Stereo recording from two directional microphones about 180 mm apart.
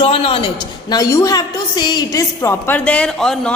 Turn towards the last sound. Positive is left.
turn(degrees=5)  # may be behind; listen again after turning